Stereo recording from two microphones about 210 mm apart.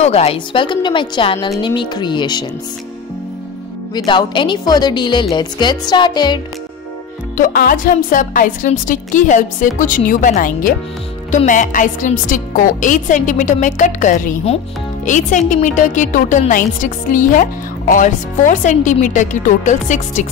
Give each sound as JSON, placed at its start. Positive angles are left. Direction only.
{"t": 0.0, "sound": "a woman's voice", "side_deg": 30}
{"t": 3.9, "sound": "a woman's voice", "side_deg": 20}
{"t": 7.3, "sound": "a woman's voice", "side_deg": 40}